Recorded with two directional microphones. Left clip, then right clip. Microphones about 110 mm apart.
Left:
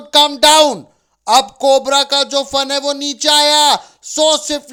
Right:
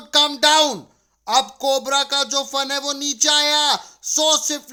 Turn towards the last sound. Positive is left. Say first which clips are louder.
# left 5 dB
turn(degrees=40)  # may be behind; listen again after turning